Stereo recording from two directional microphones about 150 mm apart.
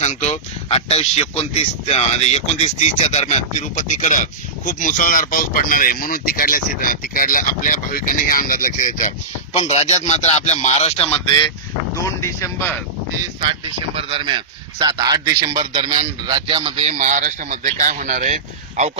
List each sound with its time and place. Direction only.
0.0 s speech: 50° left (ahead or behind)
9.5 s speech: 45° left (ahead or behind)
12.0 s speech: 20° left (ahead or behind)
13.4 s speech: 35° right (ahead or behind); by 18.3 s 60° right (ahead or behind)